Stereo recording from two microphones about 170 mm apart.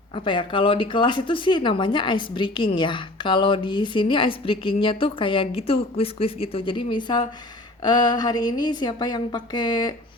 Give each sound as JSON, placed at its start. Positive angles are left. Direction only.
{"t": 0.1, "sound": "speech", "side_deg": 30}